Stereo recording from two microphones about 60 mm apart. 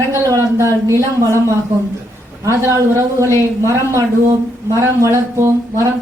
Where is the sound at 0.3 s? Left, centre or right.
Right.